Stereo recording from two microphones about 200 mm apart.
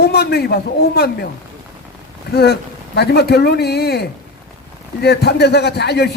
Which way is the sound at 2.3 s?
55° left (ahead or behind).